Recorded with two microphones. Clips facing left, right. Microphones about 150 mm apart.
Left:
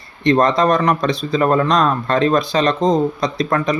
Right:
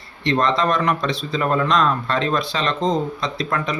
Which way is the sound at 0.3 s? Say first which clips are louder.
Left 5 dB; 40° left (ahead or behind).